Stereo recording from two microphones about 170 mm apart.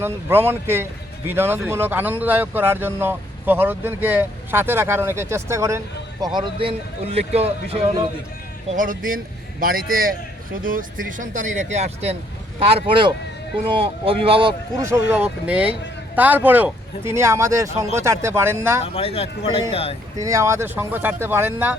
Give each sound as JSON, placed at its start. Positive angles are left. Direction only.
{"t": 0.0, "sound": "speech", "side_deg": -15}
{"t": 6.2, "sound": "a man's voice", "side_deg": -25}
{"t": 8.7, "sound": "a man's voice", "side_deg": -50}
{"t": 14.8, "sound": "speech", "side_deg": -15}
{"t": 18.8, "sound": "speech", "side_deg": 35}
{"t": 20.1, "sound": "speech", "side_deg": -20}